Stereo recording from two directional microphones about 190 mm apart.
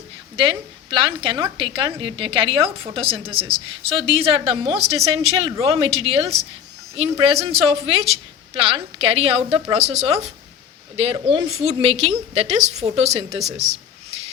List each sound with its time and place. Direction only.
0.3 s a woman's voice: 25° right (ahead or behind)